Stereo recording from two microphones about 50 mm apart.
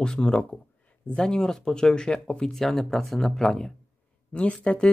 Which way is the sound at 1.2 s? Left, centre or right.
Centre.